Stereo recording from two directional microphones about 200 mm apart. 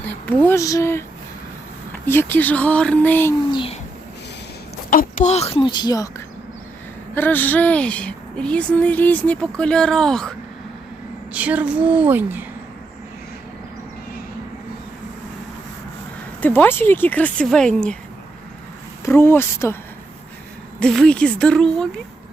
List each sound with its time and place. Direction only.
0.1 s speech: 10° left (ahead or behind)
2.0 s a woman's voice: 10° left (ahead or behind)
3.5 s a sound: 25° left (ahead or behind)
4.9 s a woman's voice: 40° left (ahead or behind); by 12.5 s 10° right (ahead or behind)
16.4 s a woman's voice: 10° left (ahead or behind)
19.0 s a woman's voice: 10° left (ahead or behind)
20.7 s speech: 5° left (ahead or behind)